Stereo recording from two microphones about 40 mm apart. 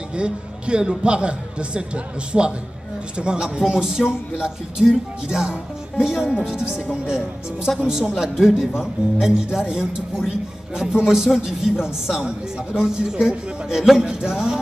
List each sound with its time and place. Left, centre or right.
0.1 s a man's voice: right
11.3 s a man's voice: centre
12.3 s a man's voice: right